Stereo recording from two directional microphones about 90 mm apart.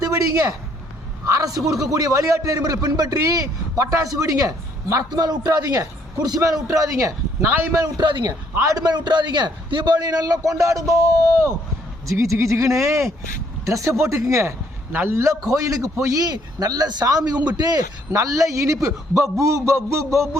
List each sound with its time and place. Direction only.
0.0 s a sound: 40° right (ahead or behind)
1.3 s a man's voice: 40° right (ahead or behind)
7.9 s a man's voice: 55° right (ahead or behind); by 20.4 s 35° right (ahead or behind)